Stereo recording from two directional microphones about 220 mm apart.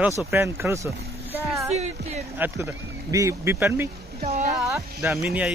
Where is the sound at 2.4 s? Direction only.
10° right (ahead or behind).